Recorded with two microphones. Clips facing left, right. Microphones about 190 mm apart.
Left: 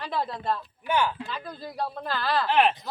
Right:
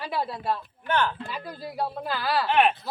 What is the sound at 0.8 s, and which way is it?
Speech, 10° left (ahead or behind).